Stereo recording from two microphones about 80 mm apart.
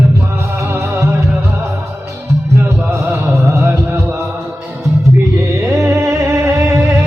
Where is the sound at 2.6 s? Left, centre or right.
Right.